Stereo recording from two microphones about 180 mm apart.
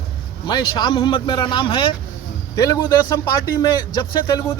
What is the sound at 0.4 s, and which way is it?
Speech, 25° left (ahead or behind).